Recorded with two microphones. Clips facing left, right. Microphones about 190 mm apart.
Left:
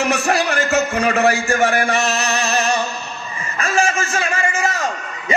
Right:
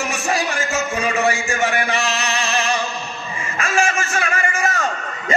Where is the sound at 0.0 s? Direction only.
60° left (ahead or behind); by 4.5 s 25° left (ahead or behind).